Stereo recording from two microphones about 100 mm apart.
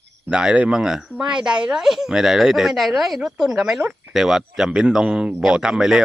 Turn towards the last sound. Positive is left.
turn(degrees=-5)  # may be behind; listen again after turning